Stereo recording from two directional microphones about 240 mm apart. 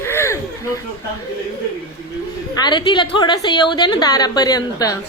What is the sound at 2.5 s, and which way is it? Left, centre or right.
A woman's voice, centre.